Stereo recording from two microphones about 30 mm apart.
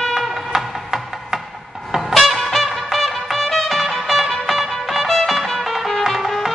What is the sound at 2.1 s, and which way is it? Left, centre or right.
Music, centre.